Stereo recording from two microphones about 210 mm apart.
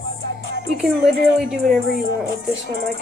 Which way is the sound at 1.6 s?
45° right (ahead or behind).